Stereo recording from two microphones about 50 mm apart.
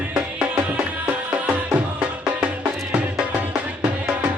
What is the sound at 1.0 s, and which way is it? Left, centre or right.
Music, right.